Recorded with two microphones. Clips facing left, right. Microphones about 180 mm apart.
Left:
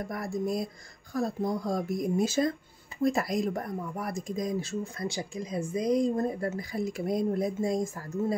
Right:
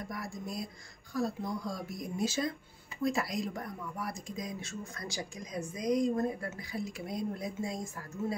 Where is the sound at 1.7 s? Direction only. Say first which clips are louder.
Left 10 dB; 50° left (ahead or behind).